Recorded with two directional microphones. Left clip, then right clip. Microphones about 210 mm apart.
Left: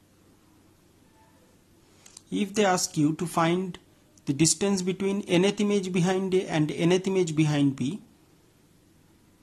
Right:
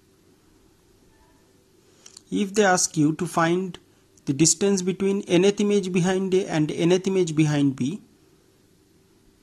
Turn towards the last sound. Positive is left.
turn(degrees=-15)  # may be behind; listen again after turning